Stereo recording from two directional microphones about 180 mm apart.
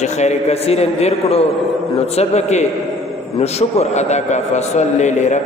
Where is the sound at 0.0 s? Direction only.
40° left (ahead or behind).